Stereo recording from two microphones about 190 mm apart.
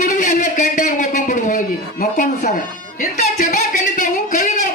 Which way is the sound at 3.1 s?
40° left (ahead or behind).